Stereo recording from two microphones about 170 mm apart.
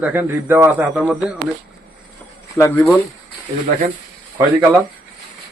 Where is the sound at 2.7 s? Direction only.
10° left (ahead or behind).